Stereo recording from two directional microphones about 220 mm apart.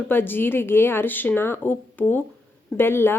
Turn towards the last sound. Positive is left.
turn(degrees=10)  # may be behind; listen again after turning